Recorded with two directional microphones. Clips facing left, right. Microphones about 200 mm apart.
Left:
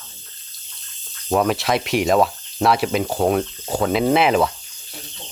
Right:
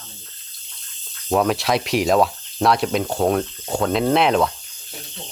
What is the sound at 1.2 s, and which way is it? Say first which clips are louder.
Speech: even; centre (ahead or behind).